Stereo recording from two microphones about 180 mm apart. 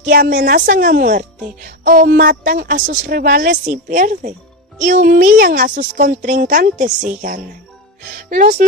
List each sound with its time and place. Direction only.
0.0 s speech: 50° right (ahead or behind)